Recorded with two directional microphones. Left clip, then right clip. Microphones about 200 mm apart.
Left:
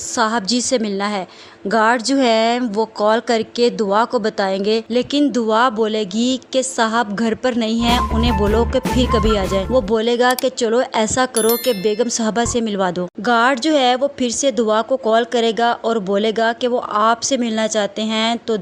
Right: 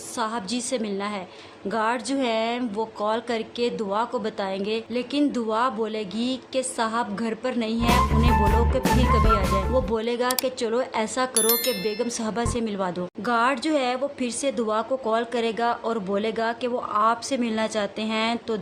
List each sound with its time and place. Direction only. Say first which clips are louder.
0.2 s speech: left 10 dB; 35° left (ahead or behind)
9.3 s speech: left 5 dB; 30° left (ahead or behind)
11.3 s speech: left 7 dB; centre (ahead or behind)
11.9 s speech: left 9 dB; 25° left (ahead or behind)